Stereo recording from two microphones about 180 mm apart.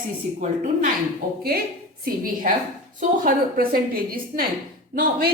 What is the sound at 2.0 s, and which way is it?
A woman's voice, 50° right (ahead or behind).